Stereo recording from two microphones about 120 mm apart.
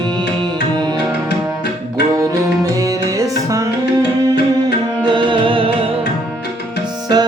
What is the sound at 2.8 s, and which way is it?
Music, 25° right (ahead or behind).